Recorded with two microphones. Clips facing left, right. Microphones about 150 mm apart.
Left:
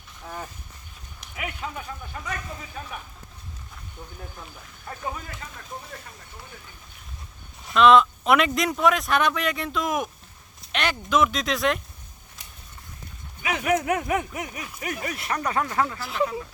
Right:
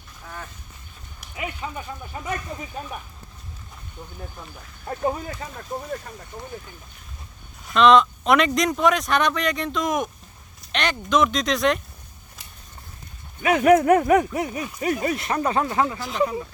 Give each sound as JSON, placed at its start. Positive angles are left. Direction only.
{"t": 1.4, "sound": "speech", "side_deg": 0}
{"t": 4.9, "sound": "speech", "side_deg": -40}
{"t": 7.7, "sound": "speech", "side_deg": 5}
{"t": 13.4, "sound": "speech", "side_deg": -45}